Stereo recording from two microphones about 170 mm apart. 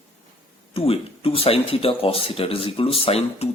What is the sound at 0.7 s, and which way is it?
Speech, 35° left (ahead or behind).